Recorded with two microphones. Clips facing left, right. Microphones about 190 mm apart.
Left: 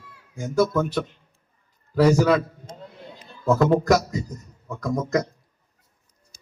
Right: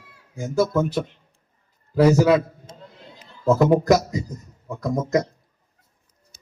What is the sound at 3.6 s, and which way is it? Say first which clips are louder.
A man's voice: right 1 dB; 20° right (ahead or behind).